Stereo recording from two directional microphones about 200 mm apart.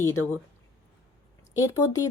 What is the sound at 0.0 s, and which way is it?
Speech, 15° left (ahead or behind).